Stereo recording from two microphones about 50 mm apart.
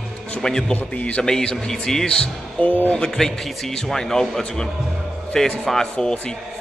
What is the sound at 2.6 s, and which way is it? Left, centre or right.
Speech, left.